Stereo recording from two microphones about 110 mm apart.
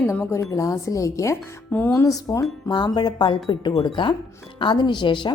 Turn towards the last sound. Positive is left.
turn(degrees=45)  # may be behind; listen again after turning